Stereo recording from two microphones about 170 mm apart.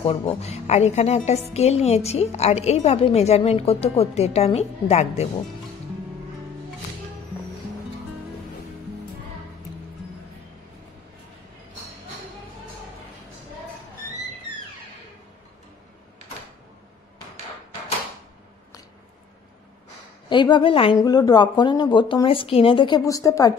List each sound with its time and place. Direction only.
0.0 s a woman's voice: 35° left (ahead or behind)
20.2 s speech: 25° left (ahead or behind)